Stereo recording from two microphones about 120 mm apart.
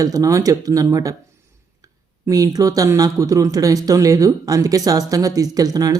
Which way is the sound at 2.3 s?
30° right (ahead or behind).